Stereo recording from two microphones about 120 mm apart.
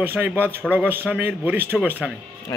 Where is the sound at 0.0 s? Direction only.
15° right (ahead or behind).